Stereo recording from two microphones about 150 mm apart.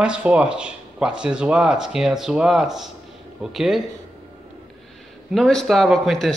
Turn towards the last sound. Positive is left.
turn(degrees=0)  # may be behind; listen again after turning